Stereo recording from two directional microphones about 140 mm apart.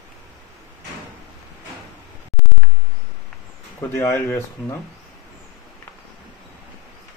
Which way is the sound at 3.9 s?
15° left (ahead or behind).